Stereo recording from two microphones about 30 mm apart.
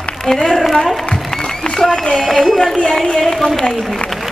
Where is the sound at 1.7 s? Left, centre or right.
Left.